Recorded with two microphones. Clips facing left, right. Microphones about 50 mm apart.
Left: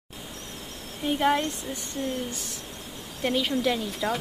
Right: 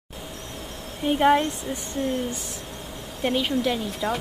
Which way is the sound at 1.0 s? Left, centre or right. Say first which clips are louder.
Right 5 dB; centre.